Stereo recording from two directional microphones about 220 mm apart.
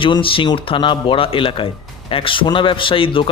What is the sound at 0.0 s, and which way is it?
A man's voice, 25° left (ahead or behind).